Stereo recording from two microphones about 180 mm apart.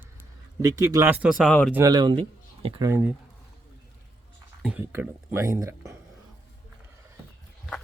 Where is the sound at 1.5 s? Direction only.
5° left (ahead or behind).